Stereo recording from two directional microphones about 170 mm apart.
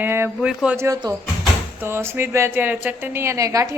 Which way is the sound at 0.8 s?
20° right (ahead or behind).